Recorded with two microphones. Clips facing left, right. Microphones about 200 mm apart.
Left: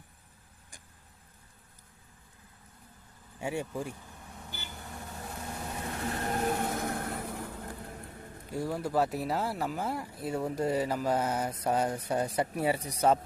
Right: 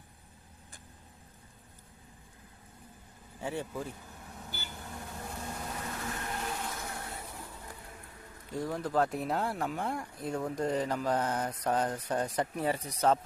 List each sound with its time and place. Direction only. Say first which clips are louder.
3.4 s speech: left 2 dB; 10° left (ahead or behind)
4.4 s vehicle: even; 5° right (ahead or behind)
6.2 s vehicle: left 11 dB; 45° left (ahead or behind)
8.5 s speech: left 1 dB; 10° left (ahead or behind)